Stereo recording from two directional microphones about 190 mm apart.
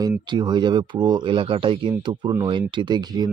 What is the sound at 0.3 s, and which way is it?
Speech, 25° right (ahead or behind).